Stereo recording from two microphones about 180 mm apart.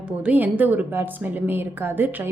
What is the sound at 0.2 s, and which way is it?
A woman's voice, 10° right (ahead or behind).